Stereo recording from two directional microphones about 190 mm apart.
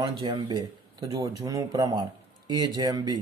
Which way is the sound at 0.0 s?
25° right (ahead or behind).